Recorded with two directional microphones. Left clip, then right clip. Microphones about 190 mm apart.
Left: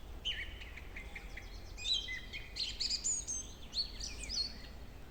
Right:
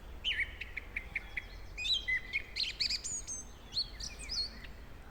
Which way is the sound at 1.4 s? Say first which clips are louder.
Right 7 dB; 15° left (ahead or behind).